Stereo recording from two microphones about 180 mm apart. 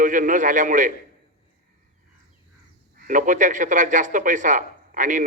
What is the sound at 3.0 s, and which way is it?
Speech, 45° right (ahead or behind).